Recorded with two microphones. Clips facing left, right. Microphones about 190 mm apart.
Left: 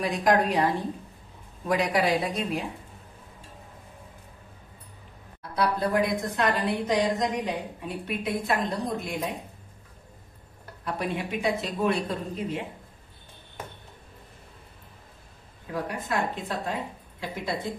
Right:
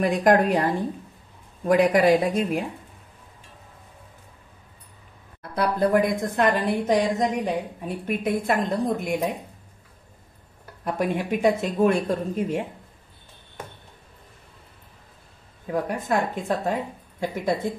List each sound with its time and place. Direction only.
0.0 s a woman's voice: 55° right (ahead or behind)
1.7 s a woman's voice: 50° right (ahead or behind)
5.4 s a woman's voice: 50° right (ahead or behind)
10.8 s a woman's voice: 45° right (ahead or behind)
15.7 s a woman's voice: 45° right (ahead or behind)